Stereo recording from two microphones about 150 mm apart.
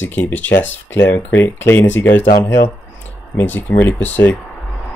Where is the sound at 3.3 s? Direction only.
10° left (ahead or behind).